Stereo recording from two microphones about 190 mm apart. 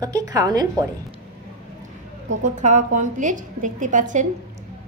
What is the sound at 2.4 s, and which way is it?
A woman's voice, 40° right (ahead or behind).